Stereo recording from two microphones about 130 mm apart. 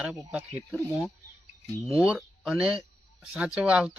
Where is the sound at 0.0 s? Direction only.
5° right (ahead or behind).